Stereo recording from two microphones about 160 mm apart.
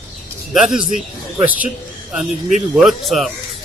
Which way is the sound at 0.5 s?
5° right (ahead or behind).